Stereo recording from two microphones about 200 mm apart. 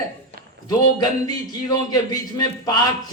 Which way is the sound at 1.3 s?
20° left (ahead or behind).